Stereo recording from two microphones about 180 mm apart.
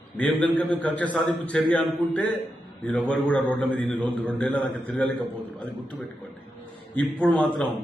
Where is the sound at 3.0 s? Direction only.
Centre (ahead or behind).